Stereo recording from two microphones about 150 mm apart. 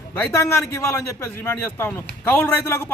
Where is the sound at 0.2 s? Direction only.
15° left (ahead or behind).